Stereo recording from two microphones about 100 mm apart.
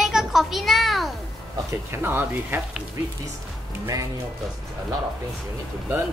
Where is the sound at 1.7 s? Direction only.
20° right (ahead or behind).